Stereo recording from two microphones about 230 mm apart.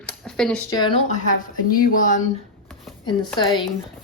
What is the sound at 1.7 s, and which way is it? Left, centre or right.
Speech, left.